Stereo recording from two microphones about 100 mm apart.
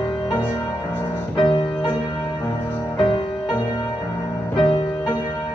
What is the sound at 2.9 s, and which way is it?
Music, 50° left (ahead or behind).